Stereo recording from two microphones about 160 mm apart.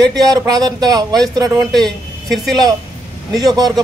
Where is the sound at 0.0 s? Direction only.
25° right (ahead or behind).